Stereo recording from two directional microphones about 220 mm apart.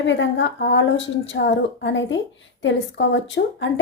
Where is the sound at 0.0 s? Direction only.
55° left (ahead or behind).